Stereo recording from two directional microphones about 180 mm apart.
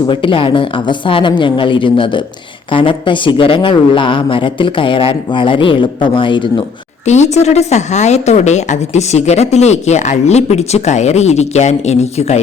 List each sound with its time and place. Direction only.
0.1 s speech: 30° left (ahead or behind)
7.1 s a woman's voice: 40° left (ahead or behind)